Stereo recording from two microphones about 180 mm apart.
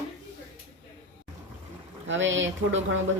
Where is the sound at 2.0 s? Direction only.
90° right.